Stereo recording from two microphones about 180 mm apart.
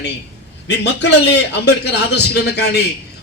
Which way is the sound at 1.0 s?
70° left (ahead or behind).